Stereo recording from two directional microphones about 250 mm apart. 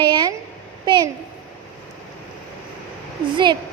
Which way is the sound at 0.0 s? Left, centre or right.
Centre.